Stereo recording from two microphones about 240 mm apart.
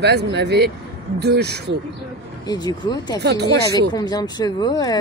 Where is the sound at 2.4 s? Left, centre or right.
Centre.